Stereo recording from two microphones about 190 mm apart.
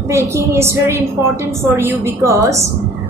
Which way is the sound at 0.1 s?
15° right (ahead or behind).